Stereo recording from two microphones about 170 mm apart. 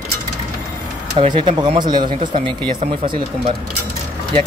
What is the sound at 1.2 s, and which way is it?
Speech, 30° right (ahead or behind).